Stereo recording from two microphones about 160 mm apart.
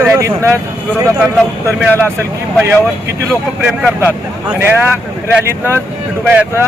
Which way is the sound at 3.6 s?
10° right (ahead or behind).